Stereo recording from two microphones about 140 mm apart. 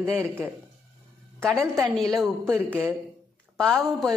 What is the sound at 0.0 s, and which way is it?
Speech, 20° right (ahead or behind).